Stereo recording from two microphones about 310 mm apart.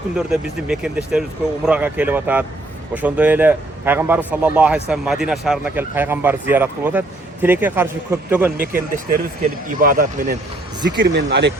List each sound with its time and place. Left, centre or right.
0.3 s speech: centre
9.0 s speech: right